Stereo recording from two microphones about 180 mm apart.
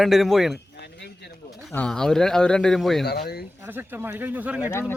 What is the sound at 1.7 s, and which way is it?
A man's voice, 5° left (ahead or behind).